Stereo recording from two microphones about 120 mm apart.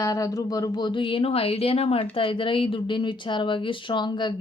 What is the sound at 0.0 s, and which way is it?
A woman's voice, 30° left (ahead or behind).